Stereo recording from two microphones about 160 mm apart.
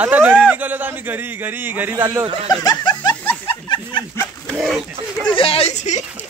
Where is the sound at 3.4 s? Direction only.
30° left (ahead or behind).